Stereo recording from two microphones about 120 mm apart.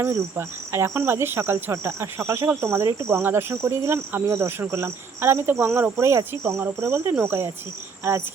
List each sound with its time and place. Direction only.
0.0 s cricket: 20° right (ahead or behind)